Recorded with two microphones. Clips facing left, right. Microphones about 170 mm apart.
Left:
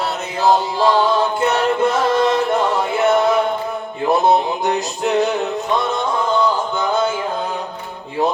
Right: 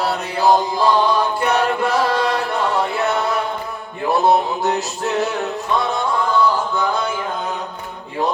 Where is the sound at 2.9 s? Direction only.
20° left (ahead or behind).